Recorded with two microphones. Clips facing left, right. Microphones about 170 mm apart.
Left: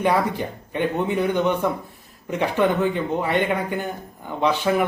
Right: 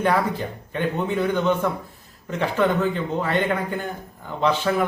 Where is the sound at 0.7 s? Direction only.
15° left (ahead or behind).